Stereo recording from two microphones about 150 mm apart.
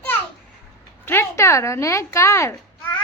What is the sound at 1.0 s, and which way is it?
Speech, 15° left (ahead or behind).